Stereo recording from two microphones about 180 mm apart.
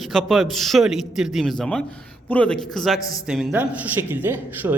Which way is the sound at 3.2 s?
5° right (ahead or behind).